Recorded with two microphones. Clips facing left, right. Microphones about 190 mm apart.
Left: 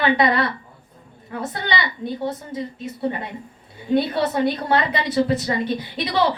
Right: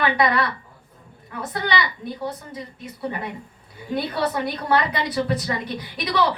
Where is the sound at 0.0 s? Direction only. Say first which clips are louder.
Left 2 dB; 25° left (ahead or behind).